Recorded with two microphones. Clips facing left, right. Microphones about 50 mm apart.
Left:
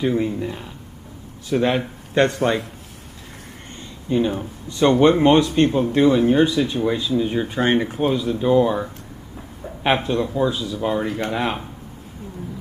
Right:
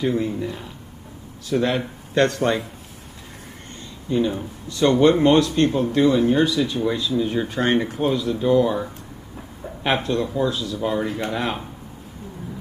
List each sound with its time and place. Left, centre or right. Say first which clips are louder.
0.0 s speech: left 1 dB; centre
4.1 s speech: left 1 dB; centre
4.6 s speech: left 1 dB; left; by 10.5 s centre
10.5 s speech: left 1 dB; left
10.8 s speech: left 1 dB; centre